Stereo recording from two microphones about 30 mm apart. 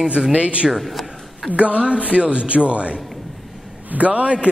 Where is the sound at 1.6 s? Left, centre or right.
Right.